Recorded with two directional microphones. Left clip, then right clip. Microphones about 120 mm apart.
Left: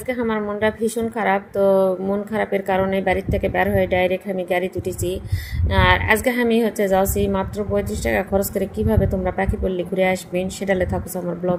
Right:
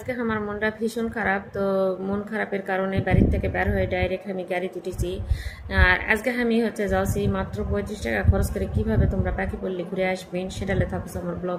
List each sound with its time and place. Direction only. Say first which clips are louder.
0.1 s a woman's voice: left 5 dB; 35° left (ahead or behind)